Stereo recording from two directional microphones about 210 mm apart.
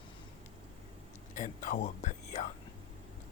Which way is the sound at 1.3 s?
35° left (ahead or behind).